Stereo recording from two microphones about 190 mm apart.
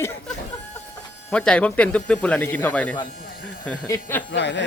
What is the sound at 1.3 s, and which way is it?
Speech, 5° left (ahead or behind).